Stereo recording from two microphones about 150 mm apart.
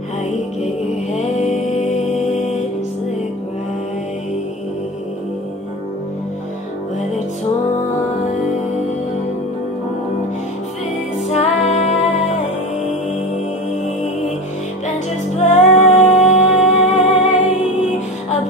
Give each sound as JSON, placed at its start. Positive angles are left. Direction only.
{"t": 1.4, "sound": "music", "side_deg": 50}
{"t": 11.3, "sound": "music", "side_deg": 50}
{"t": 15.3, "sound": "music", "side_deg": 50}